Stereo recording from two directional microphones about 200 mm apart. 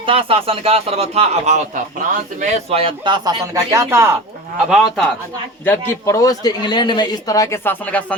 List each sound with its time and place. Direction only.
0.0 s speech: 25° right (ahead or behind)
4.5 s speech: centre (ahead or behind)
5.6 s speech: 15° left (ahead or behind)